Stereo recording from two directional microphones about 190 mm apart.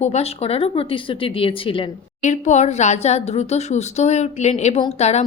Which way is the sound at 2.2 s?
40° left (ahead or behind).